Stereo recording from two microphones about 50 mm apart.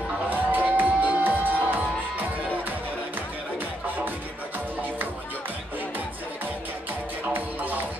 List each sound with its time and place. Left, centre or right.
0.3 s music: right
3.5 s music: right
7.3 s music: right